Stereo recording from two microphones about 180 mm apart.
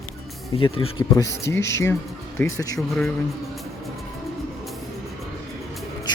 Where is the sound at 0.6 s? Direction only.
30° left (ahead or behind).